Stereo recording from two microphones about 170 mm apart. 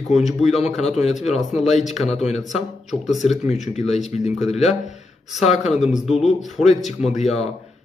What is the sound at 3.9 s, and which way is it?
Speech, 40° left (ahead or behind).